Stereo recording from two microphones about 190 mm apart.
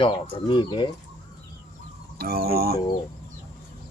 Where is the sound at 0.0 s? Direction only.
25° left (ahead or behind).